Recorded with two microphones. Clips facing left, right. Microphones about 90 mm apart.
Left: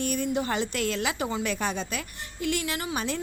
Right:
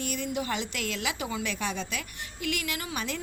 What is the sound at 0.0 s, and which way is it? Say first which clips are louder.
A woman's voice: left 4 dB; 40° left (ahead or behind).